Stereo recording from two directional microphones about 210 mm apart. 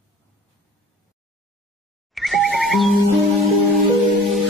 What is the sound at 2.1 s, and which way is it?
Music, centre (ahead or behind).